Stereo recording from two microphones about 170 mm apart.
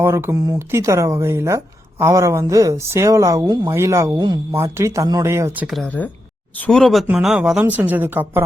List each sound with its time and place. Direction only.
0.0 s speech: 15° right (ahead or behind)
5.6 s speech: centre (ahead or behind)